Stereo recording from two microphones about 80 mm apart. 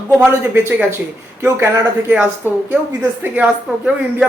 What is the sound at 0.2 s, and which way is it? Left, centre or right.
Speech, right.